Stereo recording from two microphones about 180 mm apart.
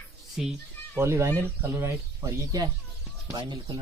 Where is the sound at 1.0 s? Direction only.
15° right (ahead or behind).